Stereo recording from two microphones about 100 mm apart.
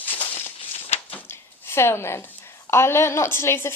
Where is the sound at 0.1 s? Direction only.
60° left (ahead or behind).